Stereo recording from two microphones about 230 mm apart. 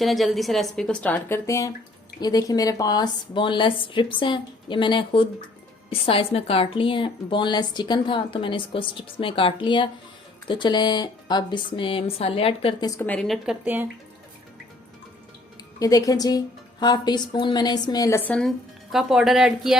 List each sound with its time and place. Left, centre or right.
0.0 s a woman's voice: centre; by 12.9 s left
13.0 s a woman's voice: centre
15.8 s a woman's voice: centre